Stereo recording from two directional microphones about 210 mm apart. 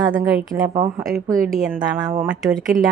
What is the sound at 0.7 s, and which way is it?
Speech, 20° right (ahead or behind).